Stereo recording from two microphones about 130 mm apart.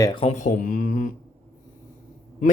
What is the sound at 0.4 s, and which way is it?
Speech, 90° left.